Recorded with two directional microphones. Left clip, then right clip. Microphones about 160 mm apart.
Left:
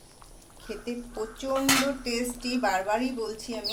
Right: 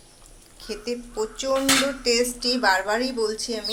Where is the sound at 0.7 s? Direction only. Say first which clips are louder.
Right 5 dB; 10° right (ahead or behind).